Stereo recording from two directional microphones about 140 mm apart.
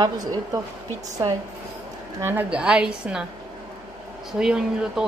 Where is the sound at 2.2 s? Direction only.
10° right (ahead or behind).